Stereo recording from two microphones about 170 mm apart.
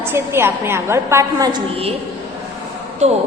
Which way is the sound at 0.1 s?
15° right (ahead or behind).